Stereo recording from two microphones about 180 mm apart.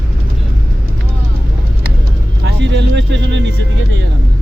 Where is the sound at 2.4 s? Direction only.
80° right.